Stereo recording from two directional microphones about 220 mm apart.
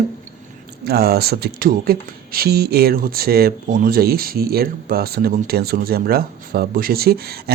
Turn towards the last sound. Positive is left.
turn(degrees=-45)  # may be behind; listen again after turning